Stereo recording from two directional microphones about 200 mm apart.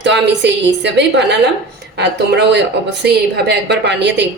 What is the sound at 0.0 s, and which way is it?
A woman's voice, 60° right (ahead or behind).